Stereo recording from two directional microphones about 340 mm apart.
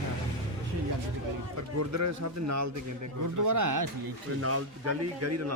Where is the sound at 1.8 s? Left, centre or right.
Right.